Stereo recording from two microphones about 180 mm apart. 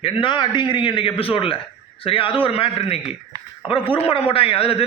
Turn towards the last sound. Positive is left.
turn(degrees=35)  # may be behind; listen again after turning